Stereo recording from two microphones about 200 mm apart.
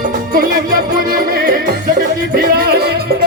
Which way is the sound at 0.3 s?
45° right (ahead or behind).